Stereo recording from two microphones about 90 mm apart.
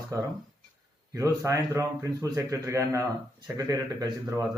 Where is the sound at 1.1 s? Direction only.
40° right (ahead or behind).